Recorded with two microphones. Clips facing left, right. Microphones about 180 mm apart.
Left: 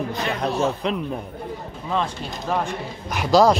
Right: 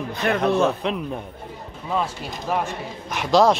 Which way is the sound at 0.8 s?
Centre (ahead or behind).